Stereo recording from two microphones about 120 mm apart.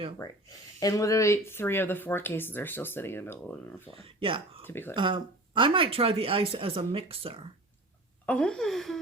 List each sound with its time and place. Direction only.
0.2 s speech: 30° left (ahead or behind); by 3.8 s 10° left (ahead or behind)
3.9 s speech: 50° right (ahead or behind)
4.6 s speech: 20° left (ahead or behind)
4.9 s speech: 45° right (ahead or behind)
8.3 s speech: 5° left (ahead or behind)